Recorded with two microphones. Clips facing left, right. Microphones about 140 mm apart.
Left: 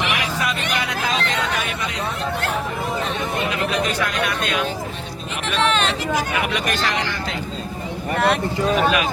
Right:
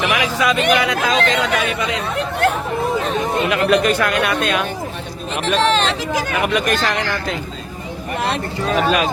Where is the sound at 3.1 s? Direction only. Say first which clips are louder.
Right 5 dB; 40° right (ahead or behind).